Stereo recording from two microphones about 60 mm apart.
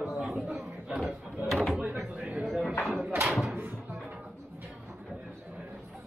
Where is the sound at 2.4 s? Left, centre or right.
Centre.